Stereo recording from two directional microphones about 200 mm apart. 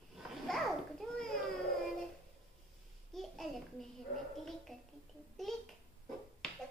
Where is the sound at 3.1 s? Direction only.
Centre (ahead or behind).